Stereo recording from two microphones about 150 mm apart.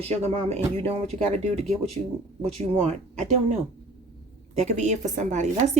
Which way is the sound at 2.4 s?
50° right (ahead or behind).